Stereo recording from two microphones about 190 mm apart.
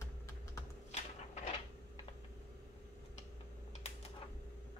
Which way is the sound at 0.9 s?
35° left (ahead or behind).